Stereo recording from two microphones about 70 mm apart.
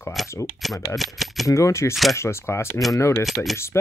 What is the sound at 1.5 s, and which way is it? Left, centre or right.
Speech, left.